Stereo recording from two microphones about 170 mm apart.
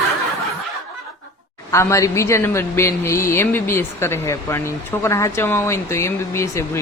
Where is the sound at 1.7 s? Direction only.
15° left (ahead or behind).